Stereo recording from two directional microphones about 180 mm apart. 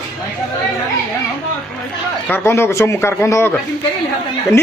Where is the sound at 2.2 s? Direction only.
15° left (ahead or behind).